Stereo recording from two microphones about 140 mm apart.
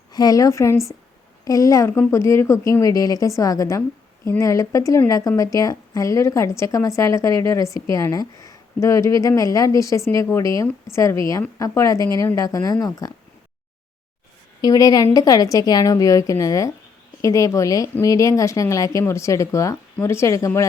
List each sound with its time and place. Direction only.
0.1 s a woman's voice: 25° left (ahead or behind)
14.6 s a woman's voice: 25° left (ahead or behind)